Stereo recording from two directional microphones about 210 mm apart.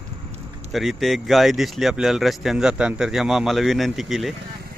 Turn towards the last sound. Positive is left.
turn(degrees=0)  # may be behind; listen again after turning